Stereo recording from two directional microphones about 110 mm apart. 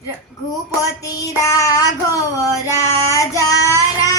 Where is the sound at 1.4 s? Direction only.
30° left (ahead or behind).